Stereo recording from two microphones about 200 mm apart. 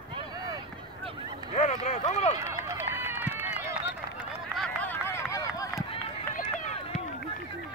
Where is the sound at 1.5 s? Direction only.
30° left (ahead or behind).